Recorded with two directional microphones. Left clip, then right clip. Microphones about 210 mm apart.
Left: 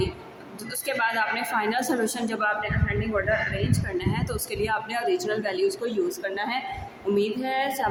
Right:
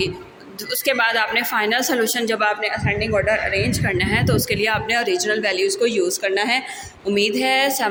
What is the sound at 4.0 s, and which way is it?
A woman's voice, 10° right (ahead or behind).